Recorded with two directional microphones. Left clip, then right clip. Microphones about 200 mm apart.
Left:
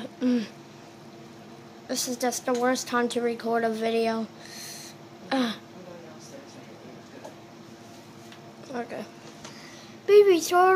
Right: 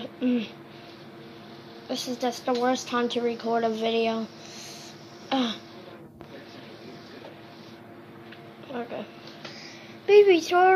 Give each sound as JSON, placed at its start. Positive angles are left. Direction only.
{"t": 0.0, "sound": "a sound", "side_deg": 20}
{"t": 1.9, "sound": "a woman's voice", "side_deg": 15}
{"t": 5.3, "sound": "a woman's voice", "side_deg": 10}
{"t": 10.0, "sound": "a woman's voice", "side_deg": 10}